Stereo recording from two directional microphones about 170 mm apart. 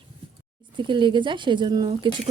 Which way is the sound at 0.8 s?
30° right (ahead or behind).